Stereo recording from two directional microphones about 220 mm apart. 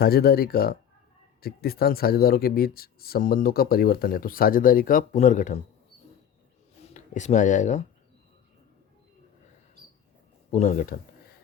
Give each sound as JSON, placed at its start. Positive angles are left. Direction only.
{"t": 0.0, "sound": "speech", "side_deg": 45}
{"t": 6.8, "sound": "speech", "side_deg": 35}
{"t": 10.5, "sound": "speech", "side_deg": 35}